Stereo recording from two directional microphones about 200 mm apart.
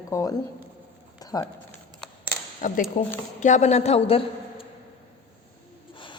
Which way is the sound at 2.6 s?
45° left (ahead or behind).